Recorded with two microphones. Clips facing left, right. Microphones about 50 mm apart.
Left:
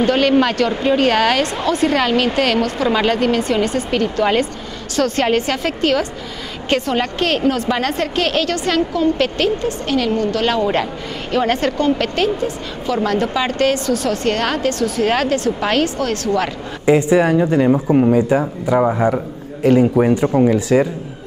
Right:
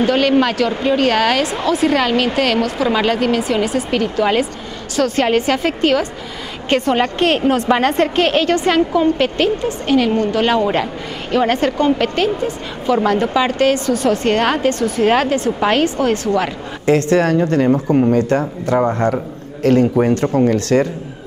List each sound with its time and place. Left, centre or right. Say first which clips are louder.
0.0 s a woman's voice: even; centre; by 7.8 s right
7.8 s a woman's voice: right 4 dB; centre
16.8 s speech: left 1 dB; centre